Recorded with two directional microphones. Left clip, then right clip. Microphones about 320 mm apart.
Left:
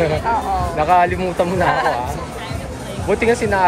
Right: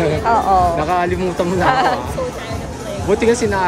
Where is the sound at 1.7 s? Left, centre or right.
Right.